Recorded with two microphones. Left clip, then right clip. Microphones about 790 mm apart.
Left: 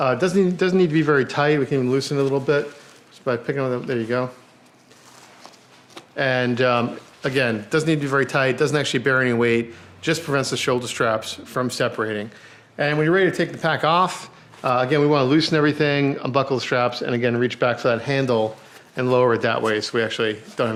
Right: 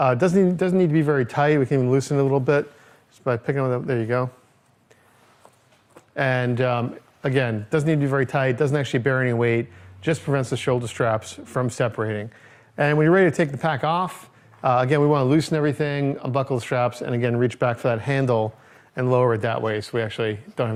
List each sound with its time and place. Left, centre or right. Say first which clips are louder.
0.0 s speech: even; right
6.1 s speech: left 2 dB; right